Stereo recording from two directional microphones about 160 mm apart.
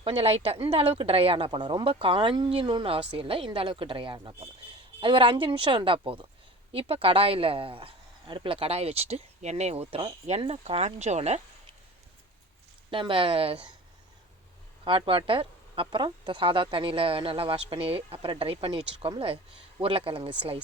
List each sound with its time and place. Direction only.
0.0 s speech: 35° right (ahead or behind)
12.9 s speech: 35° right (ahead or behind)
14.8 s speech: 35° right (ahead or behind)